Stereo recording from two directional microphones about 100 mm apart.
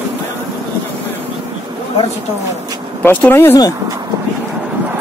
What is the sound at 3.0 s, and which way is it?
Speech, 20° left (ahead or behind).